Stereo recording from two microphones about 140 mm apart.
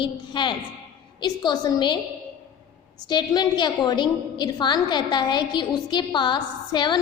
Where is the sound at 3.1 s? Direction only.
30° left (ahead or behind).